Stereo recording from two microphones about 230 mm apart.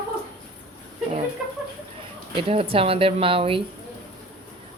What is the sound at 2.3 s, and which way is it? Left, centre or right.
Speech, right.